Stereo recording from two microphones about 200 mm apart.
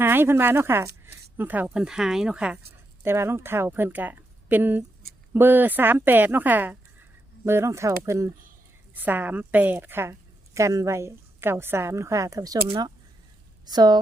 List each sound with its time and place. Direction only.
0.0 s a woman's voice: 10° right (ahead or behind)